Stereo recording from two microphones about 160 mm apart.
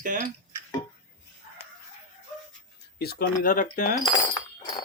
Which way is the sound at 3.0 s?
75° left (ahead or behind).